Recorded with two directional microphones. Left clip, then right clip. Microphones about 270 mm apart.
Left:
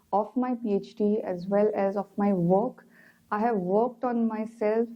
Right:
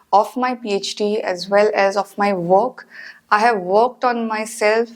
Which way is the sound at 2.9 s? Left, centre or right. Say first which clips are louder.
Right 15 dB; centre.